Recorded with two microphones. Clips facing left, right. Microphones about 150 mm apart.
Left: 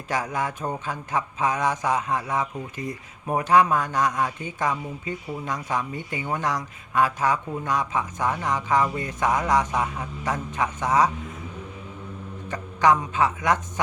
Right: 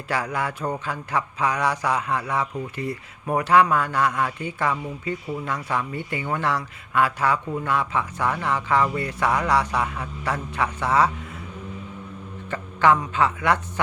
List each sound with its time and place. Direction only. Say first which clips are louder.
0.1 s speech: right 1 dB; 20° left (ahead or behind)
12.5 s speech: right 1 dB; 15° left (ahead or behind)